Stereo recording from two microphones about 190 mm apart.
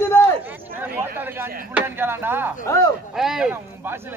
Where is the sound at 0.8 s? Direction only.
10° right (ahead or behind).